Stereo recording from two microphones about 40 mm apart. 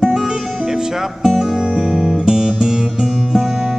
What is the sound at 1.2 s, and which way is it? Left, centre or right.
Music, centre.